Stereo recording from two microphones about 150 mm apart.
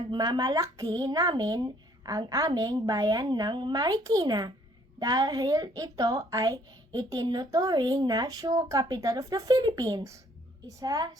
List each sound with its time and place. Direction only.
0.0 s a woman's voice: 30° right (ahead or behind)